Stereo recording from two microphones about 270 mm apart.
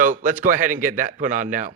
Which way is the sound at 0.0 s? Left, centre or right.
Right.